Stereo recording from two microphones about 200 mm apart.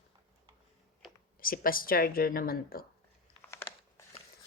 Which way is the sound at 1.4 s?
45° left (ahead or behind).